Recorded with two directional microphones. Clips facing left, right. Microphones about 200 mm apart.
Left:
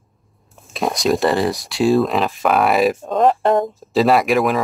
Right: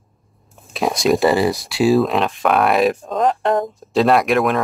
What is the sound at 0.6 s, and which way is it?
Speech, centre (ahead or behind).